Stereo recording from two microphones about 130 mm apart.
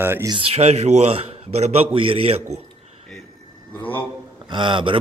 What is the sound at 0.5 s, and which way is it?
A man's voice, 55° right (ahead or behind).